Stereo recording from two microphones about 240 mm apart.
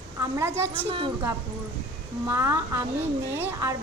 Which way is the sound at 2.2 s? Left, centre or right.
Centre.